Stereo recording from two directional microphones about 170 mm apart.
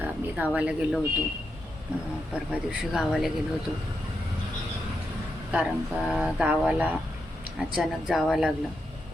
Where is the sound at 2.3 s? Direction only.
5° right (ahead or behind).